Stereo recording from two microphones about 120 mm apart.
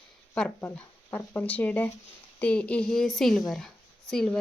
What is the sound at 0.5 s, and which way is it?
A woman's voice, 20° left (ahead or behind).